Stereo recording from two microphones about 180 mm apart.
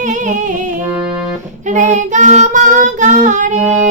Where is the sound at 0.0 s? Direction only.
45° right (ahead or behind).